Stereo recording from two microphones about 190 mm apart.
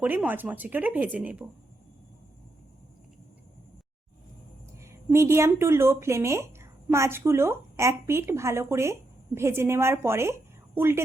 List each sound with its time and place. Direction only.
0.0 s speech: 10° right (ahead or behind)
4.8 s speech: 15° right (ahead or behind)